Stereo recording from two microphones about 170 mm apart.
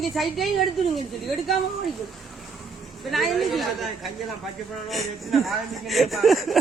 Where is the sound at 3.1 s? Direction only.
Centre (ahead or behind).